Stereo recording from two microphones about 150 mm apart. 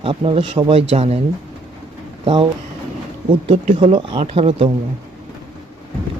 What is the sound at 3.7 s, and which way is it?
Speech, 35° right (ahead or behind).